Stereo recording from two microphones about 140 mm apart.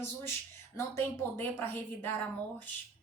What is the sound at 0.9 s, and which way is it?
A woman's voice, 15° left (ahead or behind).